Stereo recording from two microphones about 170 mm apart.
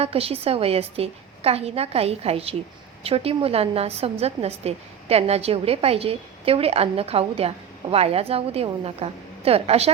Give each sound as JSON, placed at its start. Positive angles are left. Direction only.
{"t": 0.0, "sound": "a woman's voice", "side_deg": -35}